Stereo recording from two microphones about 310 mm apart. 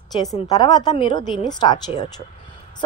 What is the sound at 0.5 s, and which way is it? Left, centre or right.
A woman's voice, centre.